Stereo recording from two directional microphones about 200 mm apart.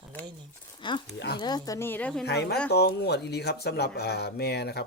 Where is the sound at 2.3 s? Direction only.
55° left (ahead or behind).